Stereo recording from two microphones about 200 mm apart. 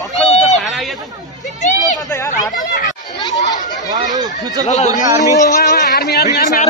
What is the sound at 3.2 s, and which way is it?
Chatter, 20° left (ahead or behind).